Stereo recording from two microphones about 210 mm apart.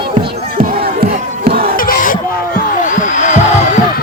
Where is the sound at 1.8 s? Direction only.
40° left (ahead or behind).